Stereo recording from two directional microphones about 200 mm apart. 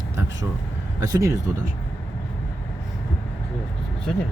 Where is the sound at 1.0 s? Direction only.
15° right (ahead or behind).